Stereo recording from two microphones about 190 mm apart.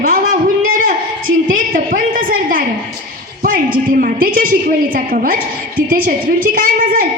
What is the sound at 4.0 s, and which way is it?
A woman's voice, 50° right (ahead or behind).